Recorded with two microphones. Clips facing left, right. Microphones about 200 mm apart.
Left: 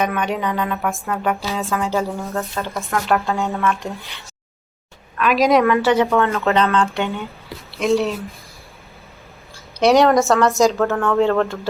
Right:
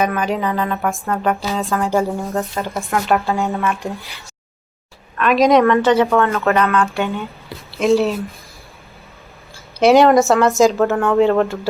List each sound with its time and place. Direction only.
0.0 s speech: centre (ahead or behind)
1.9 s speech: 15° right (ahead or behind)
3.1 s speech: centre (ahead or behind)
5.1 s speech: centre (ahead or behind)
6.1 s speech: 15° left (ahead or behind)
7.7 s speech: centre (ahead or behind)
9.8 s speech: centre (ahead or behind)
10.8 s speech: 15° right (ahead or behind)